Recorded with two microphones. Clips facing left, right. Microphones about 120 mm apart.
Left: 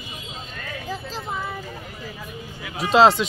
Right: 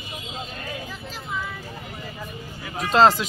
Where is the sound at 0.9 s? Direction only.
35° left (ahead or behind).